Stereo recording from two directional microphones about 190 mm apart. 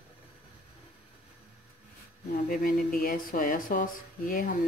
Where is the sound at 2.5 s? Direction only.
50° left (ahead or behind).